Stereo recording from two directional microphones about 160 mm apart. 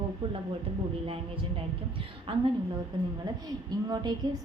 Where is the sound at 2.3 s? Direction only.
35° right (ahead or behind).